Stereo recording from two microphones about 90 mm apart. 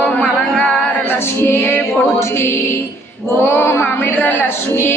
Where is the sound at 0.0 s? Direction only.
10° left (ahead or behind).